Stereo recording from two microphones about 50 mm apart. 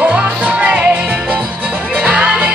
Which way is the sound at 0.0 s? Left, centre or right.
Right.